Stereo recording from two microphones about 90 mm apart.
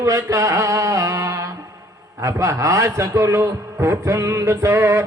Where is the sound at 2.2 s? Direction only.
35° right (ahead or behind).